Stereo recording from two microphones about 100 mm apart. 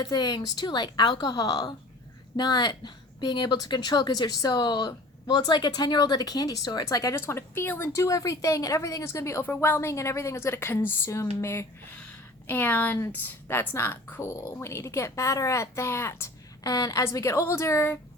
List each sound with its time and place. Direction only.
0.0 s a woman's voice: 45° left (ahead or behind); by 17.9 s 25° left (ahead or behind)